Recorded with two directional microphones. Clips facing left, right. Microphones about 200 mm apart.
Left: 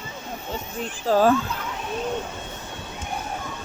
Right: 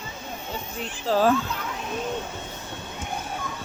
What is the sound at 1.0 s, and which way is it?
Speech, 50° left (ahead or behind).